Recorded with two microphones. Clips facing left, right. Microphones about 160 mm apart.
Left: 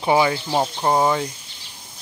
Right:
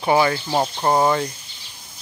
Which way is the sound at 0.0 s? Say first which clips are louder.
Even; 10° left (ahead or behind).